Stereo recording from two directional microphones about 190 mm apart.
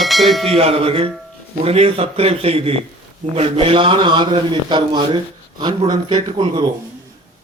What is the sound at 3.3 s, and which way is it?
A man's voice, 30° right (ahead or behind).